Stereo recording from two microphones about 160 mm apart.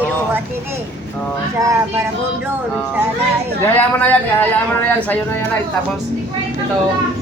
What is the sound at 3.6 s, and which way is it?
Speech, 10° left (ahead or behind).